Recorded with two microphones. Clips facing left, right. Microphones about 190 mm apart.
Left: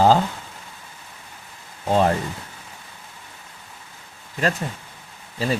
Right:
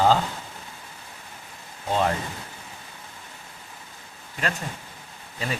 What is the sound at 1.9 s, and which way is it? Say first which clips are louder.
Speech: left 5 dB; 40° left (ahead or behind).